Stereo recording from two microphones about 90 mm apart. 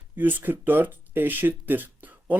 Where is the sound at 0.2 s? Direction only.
20° right (ahead or behind).